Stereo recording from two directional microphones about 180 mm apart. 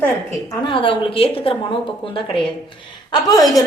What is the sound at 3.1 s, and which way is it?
Speech, 20° left (ahead or behind).